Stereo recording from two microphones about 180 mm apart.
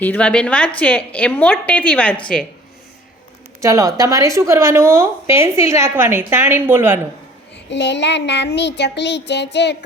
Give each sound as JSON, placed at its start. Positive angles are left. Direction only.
{"t": 0.0, "sound": "a woman's voice", "side_deg": 10}
{"t": 3.6, "sound": "a woman's voice", "side_deg": -15}
{"t": 7.5, "sound": "child singing", "side_deg": 75}